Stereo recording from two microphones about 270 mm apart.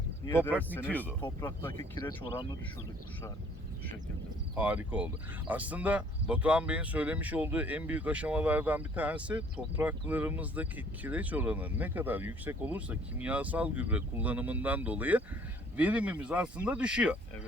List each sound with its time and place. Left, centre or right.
0.3 s speech: centre
4.5 s speech: centre